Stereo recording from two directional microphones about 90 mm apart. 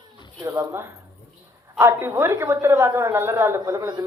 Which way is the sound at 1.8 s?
25° right (ahead or behind).